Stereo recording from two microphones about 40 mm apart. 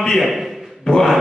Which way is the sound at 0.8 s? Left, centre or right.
Centre.